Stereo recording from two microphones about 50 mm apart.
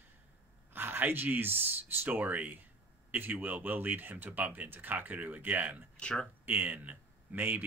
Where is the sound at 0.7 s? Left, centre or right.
Right.